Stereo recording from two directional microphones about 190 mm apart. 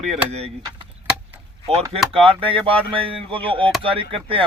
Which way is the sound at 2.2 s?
30° right (ahead or behind).